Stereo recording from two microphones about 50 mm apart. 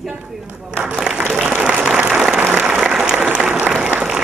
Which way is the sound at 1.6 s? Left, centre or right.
Right.